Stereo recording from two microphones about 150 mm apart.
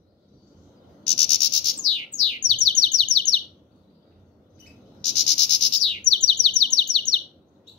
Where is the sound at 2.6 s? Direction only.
5° left (ahead or behind).